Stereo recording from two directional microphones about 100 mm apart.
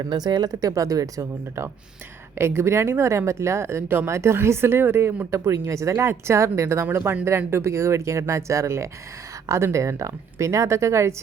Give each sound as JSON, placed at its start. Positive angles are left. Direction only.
{"t": 0.0, "sound": "speech", "side_deg": -45}